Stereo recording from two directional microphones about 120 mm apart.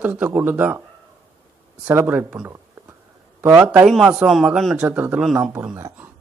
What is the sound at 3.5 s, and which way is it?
Speech, 10° right (ahead or behind).